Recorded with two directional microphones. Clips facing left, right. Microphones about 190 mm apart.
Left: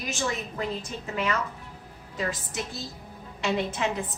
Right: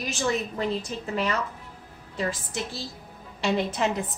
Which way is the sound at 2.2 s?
30° right (ahead or behind).